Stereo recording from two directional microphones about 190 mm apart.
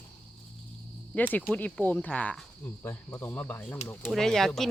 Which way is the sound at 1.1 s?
10° left (ahead or behind).